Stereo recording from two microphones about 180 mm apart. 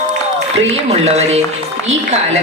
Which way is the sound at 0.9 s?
35° right (ahead or behind).